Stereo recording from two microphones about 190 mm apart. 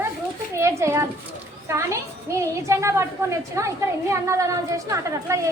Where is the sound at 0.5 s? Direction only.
15° right (ahead or behind).